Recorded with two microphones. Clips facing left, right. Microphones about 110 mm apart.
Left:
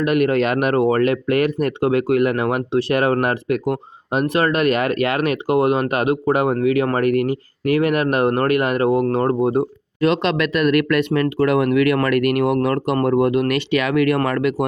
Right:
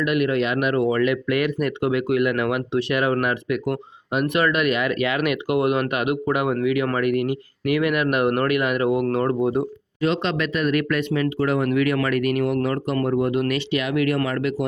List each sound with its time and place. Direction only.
0.0 s speech: 45° left (ahead or behind)
10.0 s speech: 65° left (ahead or behind)